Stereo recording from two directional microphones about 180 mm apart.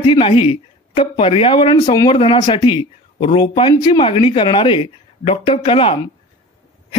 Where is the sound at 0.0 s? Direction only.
30° left (ahead or behind).